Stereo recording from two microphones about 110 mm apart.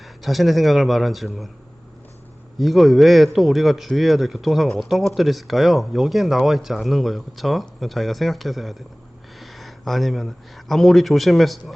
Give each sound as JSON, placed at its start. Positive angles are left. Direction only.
{"t": 0.0, "sound": "speech", "side_deg": 0}
{"t": 2.6, "sound": "speech", "side_deg": 0}